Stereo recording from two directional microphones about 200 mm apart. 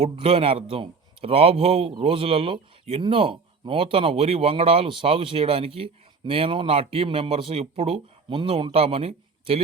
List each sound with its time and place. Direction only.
0.0 s a man's voice: 30° right (ahead or behind)